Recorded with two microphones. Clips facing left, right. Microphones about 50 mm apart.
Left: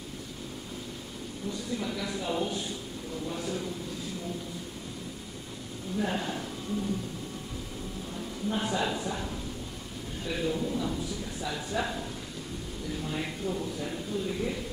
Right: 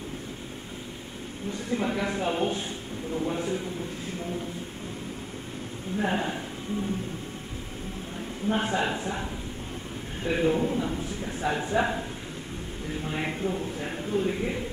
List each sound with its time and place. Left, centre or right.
1.5 s a man's voice: right
5.9 s speech: right
8.5 s a man's voice: right